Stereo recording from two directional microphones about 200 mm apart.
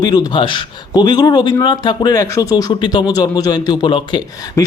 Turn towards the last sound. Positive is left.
turn(degrees=25)  # may be behind; listen again after turning